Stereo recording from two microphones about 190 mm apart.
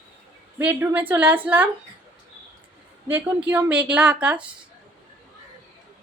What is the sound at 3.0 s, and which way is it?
A woman's voice, 10° right (ahead or behind).